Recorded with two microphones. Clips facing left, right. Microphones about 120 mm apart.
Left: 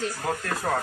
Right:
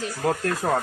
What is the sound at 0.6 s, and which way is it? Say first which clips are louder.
Speech: right 3 dB; 35° right (ahead or behind).